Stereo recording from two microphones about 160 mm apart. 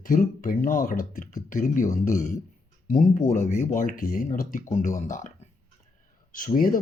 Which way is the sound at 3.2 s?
45° left (ahead or behind).